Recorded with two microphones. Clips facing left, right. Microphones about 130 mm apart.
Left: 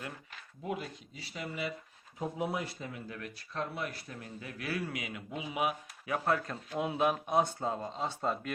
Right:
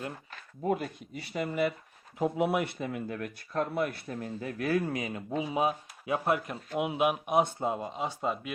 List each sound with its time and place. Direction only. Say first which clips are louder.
0.6 s speech: right 7 dB; 50° right (ahead or behind)
2.1 s speech: right 7 dB; 75° right (ahead or behind); by 6.1 s 30° right (ahead or behind)
6.1 s speech: right 2 dB; 20° right (ahead or behind)